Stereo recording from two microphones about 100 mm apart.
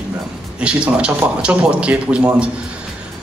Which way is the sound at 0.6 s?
10° right (ahead or behind).